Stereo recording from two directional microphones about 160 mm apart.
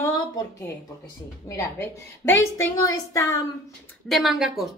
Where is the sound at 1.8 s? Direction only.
15° left (ahead or behind).